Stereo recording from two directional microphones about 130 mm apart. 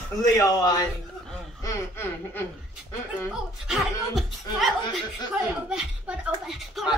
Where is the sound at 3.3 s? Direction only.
5° right (ahead or behind).